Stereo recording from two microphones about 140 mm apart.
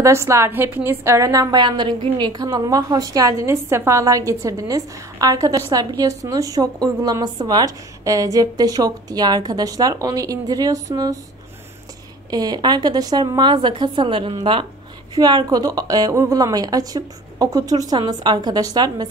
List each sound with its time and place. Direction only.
0.0 s a woman's voice: 20° right (ahead or behind)
12.3 s a woman's voice: 30° right (ahead or behind)